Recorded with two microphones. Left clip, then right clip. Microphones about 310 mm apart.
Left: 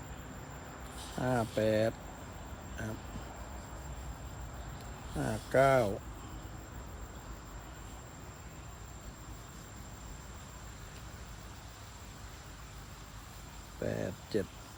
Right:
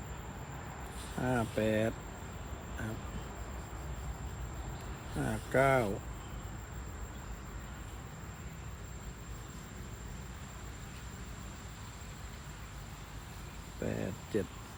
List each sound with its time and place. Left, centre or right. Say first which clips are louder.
1.2 s speech: left 2 dB; left
5.1 s speech: left 2 dB; left
13.8 s a sound: left 2 dB; left